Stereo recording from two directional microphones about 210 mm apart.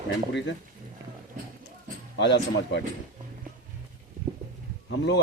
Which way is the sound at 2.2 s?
55° left (ahead or behind).